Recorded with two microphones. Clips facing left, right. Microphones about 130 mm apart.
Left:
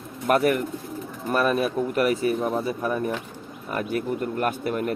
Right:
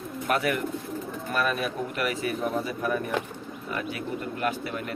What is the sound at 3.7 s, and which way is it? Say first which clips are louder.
Speech: left 7 dB; 45° left (ahead or behind).